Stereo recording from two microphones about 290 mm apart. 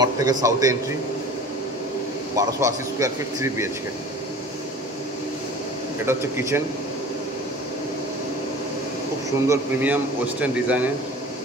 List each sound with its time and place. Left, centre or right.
0.0 s a man's voice: centre
2.3 s a man's voice: centre
6.0 s a man's voice: centre
9.5 s a man's voice: centre